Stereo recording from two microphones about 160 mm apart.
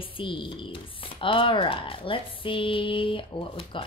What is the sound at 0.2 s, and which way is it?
A woman's voice, 30° left (ahead or behind).